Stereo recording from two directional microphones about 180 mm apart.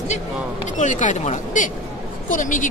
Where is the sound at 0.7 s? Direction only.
45° left (ahead or behind).